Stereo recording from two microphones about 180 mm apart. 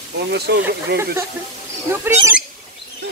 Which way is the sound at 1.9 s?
15° right (ahead or behind).